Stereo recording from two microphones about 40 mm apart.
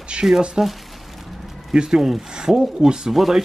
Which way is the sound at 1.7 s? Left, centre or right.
Centre.